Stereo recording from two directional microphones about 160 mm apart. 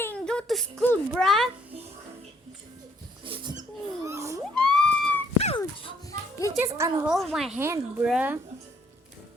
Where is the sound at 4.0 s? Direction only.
20° right (ahead or behind).